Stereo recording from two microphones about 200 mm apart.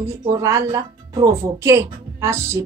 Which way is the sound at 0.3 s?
15° right (ahead or behind).